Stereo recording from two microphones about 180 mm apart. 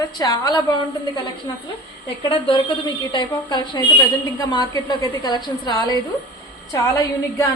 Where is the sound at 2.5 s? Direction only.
25° left (ahead or behind).